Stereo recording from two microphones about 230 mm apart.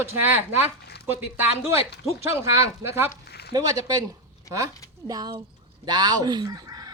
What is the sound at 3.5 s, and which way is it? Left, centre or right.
Speech, centre.